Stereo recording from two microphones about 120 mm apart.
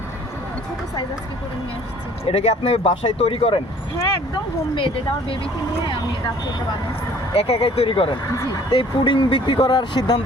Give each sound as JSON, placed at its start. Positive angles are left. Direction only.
{"t": 2.3, "sound": "speech", "side_deg": 60}
{"t": 4.7, "sound": "speech", "side_deg": 45}
{"t": 7.3, "sound": "speech", "side_deg": 55}